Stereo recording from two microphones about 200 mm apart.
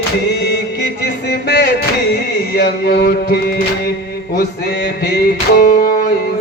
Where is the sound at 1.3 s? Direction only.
55° left (ahead or behind).